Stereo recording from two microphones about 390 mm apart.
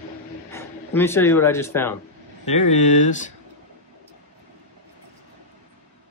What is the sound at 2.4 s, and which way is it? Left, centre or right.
Speech, centre.